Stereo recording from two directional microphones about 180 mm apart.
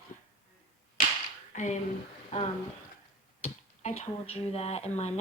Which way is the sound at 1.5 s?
40° left (ahead or behind).